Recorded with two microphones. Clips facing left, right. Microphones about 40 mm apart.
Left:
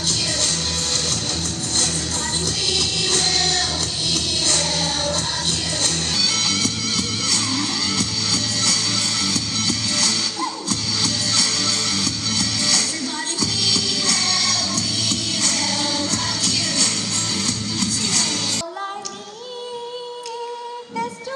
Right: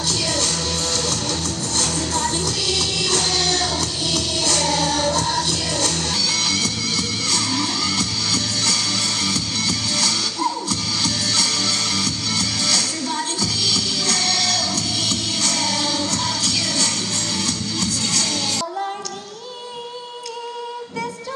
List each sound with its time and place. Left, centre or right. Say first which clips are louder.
0.3 s music: right 1 dB; right
2.6 s music: even; left
3.4 s music: right 1 dB; right
5.4 s music: right 2 dB; left
7.5 s music: right 1 dB; right
8.4 s music: even; left
8.7 s music: right 1 dB; right
9.8 s music: even; left
11.1 s music: even; right
11.4 s music: right 1 dB; left
11.7 s music: right 1 dB; right
13.4 s music: left 4 dB; left
14.1 s music: right 2 dB; right
18.1 s music: even; left